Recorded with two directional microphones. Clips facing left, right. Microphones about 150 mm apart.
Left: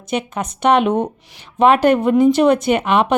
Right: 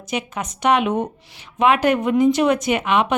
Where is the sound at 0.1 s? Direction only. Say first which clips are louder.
Left 4 dB; 30° left (ahead or behind).